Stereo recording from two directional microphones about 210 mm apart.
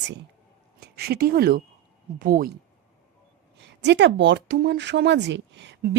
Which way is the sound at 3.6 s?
55° right (ahead or behind).